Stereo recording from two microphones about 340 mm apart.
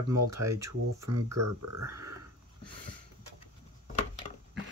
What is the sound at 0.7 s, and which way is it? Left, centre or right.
Speech, right.